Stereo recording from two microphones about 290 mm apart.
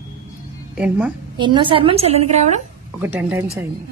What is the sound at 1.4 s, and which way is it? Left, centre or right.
A woman's voice, centre.